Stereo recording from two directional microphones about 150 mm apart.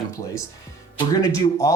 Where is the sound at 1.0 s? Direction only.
25° left (ahead or behind).